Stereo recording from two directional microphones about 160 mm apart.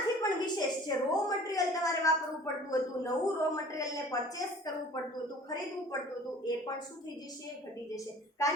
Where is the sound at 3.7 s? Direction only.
20° left (ahead or behind).